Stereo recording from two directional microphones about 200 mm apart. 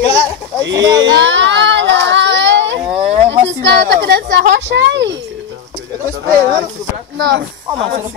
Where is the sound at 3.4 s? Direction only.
55° right (ahead or behind).